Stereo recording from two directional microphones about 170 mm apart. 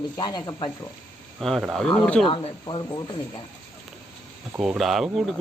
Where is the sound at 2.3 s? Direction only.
30° left (ahead or behind).